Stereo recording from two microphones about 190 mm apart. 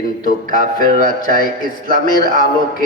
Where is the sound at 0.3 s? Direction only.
50° left (ahead or behind).